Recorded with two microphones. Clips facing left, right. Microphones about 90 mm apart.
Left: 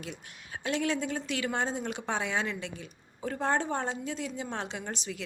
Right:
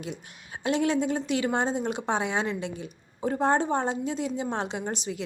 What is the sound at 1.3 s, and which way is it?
Speech, 10° right (ahead or behind).